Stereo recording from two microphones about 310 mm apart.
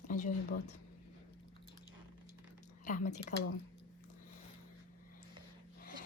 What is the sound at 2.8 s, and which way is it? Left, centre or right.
Speech, left.